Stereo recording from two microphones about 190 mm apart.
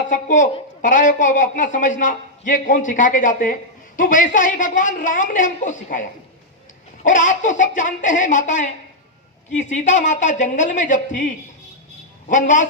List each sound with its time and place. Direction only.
0.1 s a woman's voice: 40° left (ahead or behind)
12.3 s a woman's voice: 40° left (ahead or behind)